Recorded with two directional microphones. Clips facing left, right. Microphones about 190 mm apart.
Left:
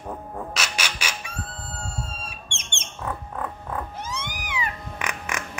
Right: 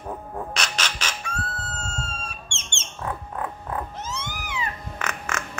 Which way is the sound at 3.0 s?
5° right (ahead or behind).